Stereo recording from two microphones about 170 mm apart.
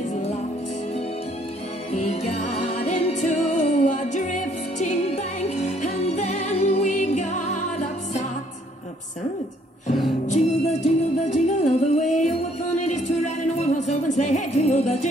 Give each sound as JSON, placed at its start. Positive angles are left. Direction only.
{"t": 1.9, "sound": "music", "side_deg": 40}
{"t": 10.3, "sound": "music", "side_deg": 45}